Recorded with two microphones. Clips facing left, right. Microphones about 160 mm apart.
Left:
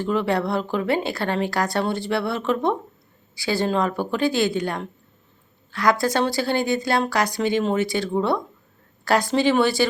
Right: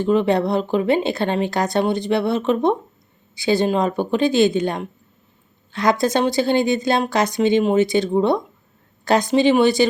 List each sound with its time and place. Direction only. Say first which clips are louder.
0.0 s speech: right 5 dB; 20° right (ahead or behind)